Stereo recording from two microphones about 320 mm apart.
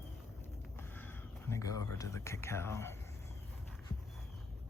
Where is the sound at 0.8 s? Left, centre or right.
Centre.